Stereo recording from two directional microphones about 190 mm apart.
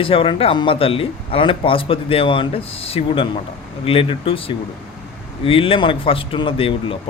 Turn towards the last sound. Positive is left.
turn(degrees=30)  # may be behind; listen again after turning